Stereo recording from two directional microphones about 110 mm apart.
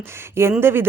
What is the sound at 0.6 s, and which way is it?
Speech, 20° right (ahead or behind).